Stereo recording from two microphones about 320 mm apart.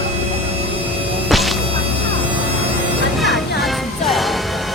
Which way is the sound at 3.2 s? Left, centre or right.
Centre.